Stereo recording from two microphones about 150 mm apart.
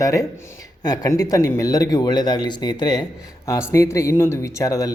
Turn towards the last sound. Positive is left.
turn(degrees=25)  # may be behind; listen again after turning